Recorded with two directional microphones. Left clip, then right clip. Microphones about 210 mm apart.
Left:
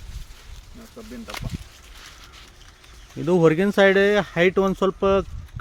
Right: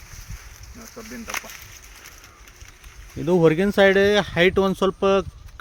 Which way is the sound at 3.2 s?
Centre (ahead or behind).